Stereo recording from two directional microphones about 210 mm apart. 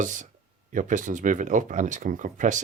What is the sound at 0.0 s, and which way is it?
Speech, 35° right (ahead or behind).